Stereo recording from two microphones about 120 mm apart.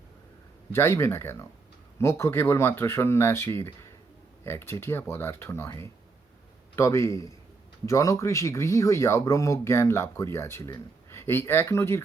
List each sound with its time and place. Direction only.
0.7 s speech: 20° left (ahead or behind)